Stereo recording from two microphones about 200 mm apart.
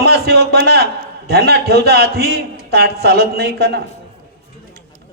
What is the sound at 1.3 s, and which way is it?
A man's voice, 55° right (ahead or behind).